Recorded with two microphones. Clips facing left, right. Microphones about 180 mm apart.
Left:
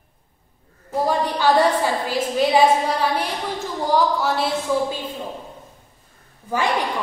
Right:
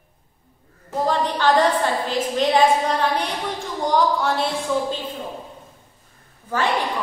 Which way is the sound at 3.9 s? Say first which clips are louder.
Even; 5° left (ahead or behind).